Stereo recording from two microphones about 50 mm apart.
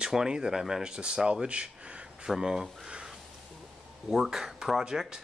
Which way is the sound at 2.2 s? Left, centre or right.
Centre.